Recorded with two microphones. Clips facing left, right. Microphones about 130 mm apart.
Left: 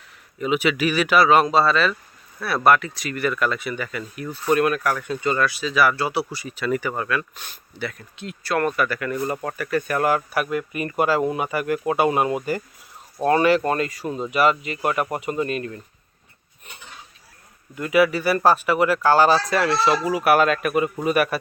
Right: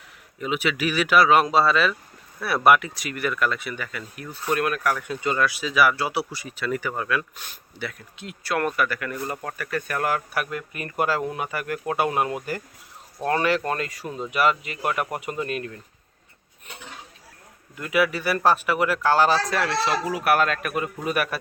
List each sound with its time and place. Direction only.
0.3 s speech: centre (ahead or behind)
17.7 s speech: centre (ahead or behind)